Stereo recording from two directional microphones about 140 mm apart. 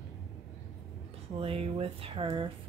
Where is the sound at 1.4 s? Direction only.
45° right (ahead or behind).